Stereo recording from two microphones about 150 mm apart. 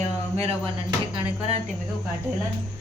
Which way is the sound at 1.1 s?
40° right (ahead or behind).